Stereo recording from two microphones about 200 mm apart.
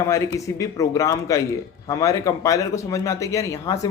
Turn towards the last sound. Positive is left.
turn(degrees=15)  # may be behind; listen again after turning